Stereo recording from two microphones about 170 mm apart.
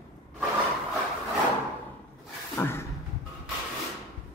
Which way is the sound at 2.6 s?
15° left (ahead or behind).